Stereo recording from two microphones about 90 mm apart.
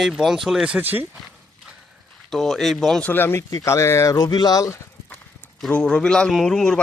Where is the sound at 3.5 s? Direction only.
35° left (ahead or behind).